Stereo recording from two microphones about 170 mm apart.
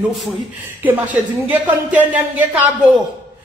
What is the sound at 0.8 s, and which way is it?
Speech, 10° right (ahead or behind).